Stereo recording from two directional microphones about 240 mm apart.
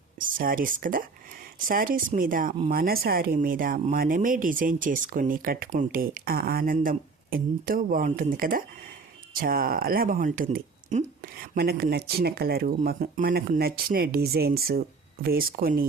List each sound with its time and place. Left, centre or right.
0.2 s speech: right